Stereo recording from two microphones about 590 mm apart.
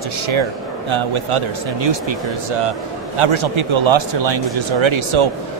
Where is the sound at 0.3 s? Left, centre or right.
Right.